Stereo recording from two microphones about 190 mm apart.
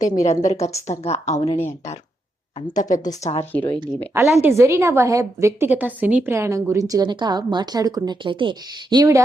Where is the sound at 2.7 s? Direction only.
40° left (ahead or behind).